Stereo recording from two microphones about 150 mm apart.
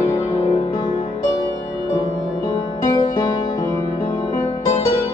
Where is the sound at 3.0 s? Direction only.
30° left (ahead or behind).